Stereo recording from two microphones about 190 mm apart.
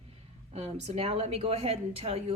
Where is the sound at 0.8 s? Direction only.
30° right (ahead or behind).